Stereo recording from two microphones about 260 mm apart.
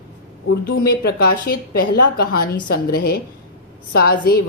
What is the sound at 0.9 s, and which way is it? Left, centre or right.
A woman's voice, left.